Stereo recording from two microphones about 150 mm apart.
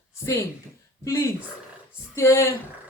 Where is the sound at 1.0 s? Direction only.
20° left (ahead or behind).